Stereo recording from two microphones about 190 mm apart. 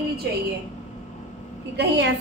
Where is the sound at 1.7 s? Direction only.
65° right (ahead or behind).